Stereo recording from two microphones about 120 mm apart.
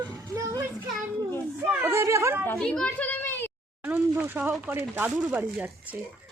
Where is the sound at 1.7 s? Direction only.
20° right (ahead or behind).